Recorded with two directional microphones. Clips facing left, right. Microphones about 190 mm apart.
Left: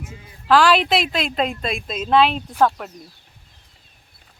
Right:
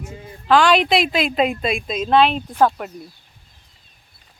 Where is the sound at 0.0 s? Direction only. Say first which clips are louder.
Right 3 dB; 35° right (ahead or behind).